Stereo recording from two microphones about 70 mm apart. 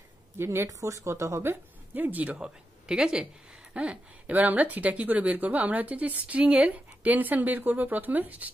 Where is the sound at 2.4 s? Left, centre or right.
Centre.